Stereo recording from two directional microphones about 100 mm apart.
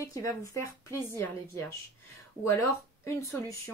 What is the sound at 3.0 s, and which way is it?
Speech, 30° left (ahead or behind).